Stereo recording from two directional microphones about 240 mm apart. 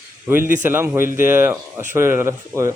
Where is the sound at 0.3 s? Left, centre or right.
Centre.